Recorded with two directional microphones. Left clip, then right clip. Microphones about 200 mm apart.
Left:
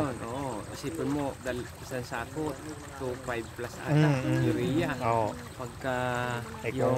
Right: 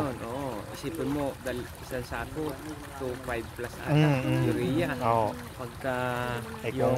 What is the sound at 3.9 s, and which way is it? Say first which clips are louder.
Speech: right 1 dB; 20° right (ahead or behind).